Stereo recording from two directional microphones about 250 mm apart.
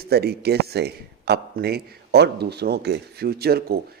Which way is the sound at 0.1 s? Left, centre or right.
Right.